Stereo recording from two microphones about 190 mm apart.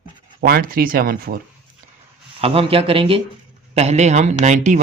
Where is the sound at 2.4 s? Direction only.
30° right (ahead or behind).